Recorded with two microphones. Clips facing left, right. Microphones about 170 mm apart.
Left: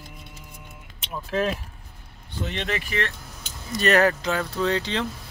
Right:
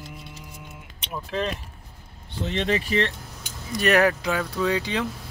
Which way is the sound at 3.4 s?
10° right (ahead or behind).